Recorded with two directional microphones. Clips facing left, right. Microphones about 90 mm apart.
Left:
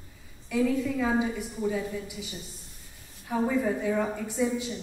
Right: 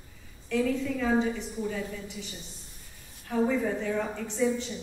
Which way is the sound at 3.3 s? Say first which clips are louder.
Even; 10° left (ahead or behind).